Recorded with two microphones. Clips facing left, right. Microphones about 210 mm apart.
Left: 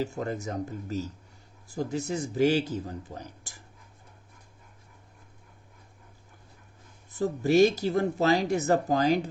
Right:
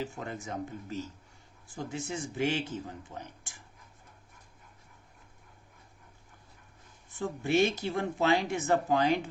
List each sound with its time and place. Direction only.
0.0 s speech: 40° left (ahead or behind)
7.1 s speech: 40° left (ahead or behind)